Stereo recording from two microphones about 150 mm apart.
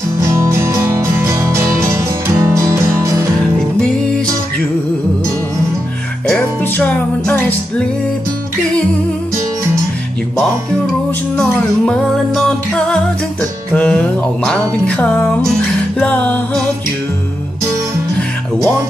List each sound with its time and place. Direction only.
0.2 s music: 20° right (ahead or behind)
3.3 s music: 5° left (ahead or behind)
6.2 s music: 10° left (ahead or behind)
11.3 s music: 5° left (ahead or behind)